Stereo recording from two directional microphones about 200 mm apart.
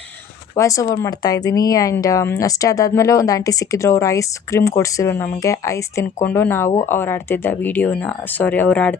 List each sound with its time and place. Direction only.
0.5 s speech: 15° left (ahead or behind)